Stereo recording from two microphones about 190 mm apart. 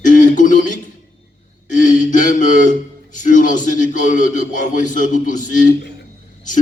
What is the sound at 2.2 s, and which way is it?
A man's voice, 40° left (ahead or behind).